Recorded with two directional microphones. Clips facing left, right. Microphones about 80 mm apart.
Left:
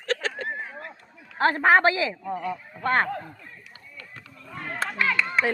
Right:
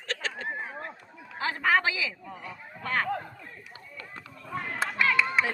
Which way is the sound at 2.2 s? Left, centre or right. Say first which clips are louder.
Left 11 dB; left.